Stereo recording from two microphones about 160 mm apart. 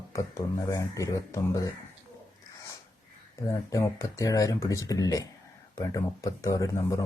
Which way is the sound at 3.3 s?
20° left (ahead or behind).